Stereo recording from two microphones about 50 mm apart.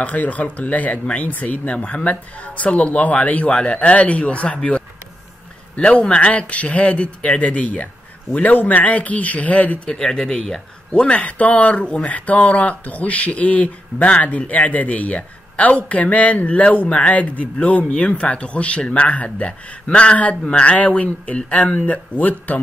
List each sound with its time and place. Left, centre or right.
0.0 s speech: left
5.8 s speech: left
9.9 s speech: centre
10.9 s speech: left